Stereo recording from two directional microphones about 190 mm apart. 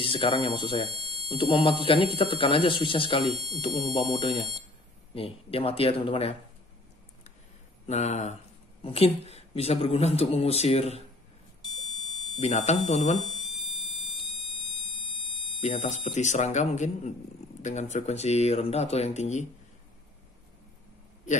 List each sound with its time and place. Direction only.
0.0 s speech: 30° left (ahead or behind)
0.9 s a sound: 30° right (ahead or behind)
1.3 s speech: 25° left (ahead or behind)
7.8 s speech: 35° left (ahead or behind)
12.4 s speech: 35° left (ahead or behind)
13.2 s fire alarm: centre (ahead or behind)
15.6 s speech: 35° left (ahead or behind)